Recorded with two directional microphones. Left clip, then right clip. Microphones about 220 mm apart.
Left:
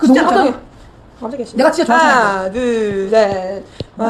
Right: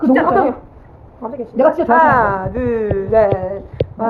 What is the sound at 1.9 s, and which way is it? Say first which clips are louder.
Speech: even; 50° left (ahead or behind).